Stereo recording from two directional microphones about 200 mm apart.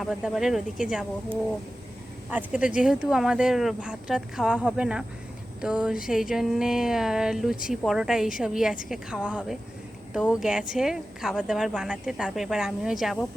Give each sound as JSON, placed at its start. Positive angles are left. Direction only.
{"t": 0.0, "sound": "a woman's voice", "side_deg": -5}